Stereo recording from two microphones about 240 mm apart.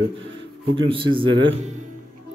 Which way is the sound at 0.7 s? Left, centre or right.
Right.